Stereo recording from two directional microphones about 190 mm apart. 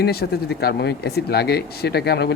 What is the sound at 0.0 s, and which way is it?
Speech, 55° left (ahead or behind).